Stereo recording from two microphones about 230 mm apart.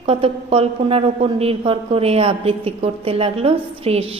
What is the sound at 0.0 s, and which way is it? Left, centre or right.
A woman's voice, right.